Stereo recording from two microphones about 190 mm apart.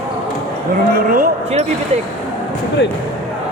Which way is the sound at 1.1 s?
45° right (ahead or behind).